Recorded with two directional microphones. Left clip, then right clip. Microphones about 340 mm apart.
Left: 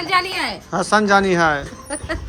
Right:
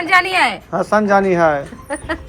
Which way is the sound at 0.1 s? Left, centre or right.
Centre.